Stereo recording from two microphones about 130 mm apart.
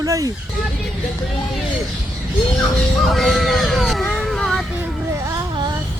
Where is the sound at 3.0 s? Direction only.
Centre (ahead or behind).